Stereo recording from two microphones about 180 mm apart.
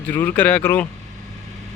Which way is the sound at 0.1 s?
10° left (ahead or behind).